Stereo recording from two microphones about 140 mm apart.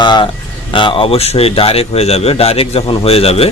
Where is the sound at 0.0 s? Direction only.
35° left (ahead or behind).